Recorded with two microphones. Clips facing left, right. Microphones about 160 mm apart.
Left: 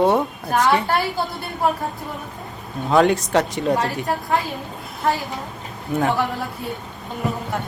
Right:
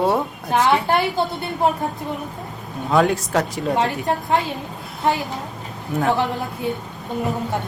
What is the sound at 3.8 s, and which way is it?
Speech, 20° right (ahead or behind).